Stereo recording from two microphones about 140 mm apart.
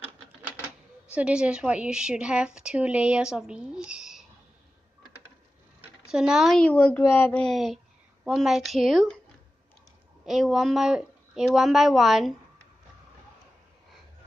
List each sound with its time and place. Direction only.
1.1 s a woman's voice: 10° right (ahead or behind)
6.0 s speech: 5° right (ahead or behind); by 7.4 s 15° left (ahead or behind)
7.4 s speech: centre (ahead or behind)
10.2 s speech: centre (ahead or behind)